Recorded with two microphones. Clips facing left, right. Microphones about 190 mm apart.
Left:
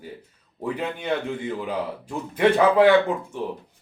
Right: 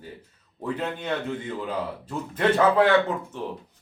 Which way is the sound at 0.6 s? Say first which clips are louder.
Left 2 dB; 10° left (ahead or behind).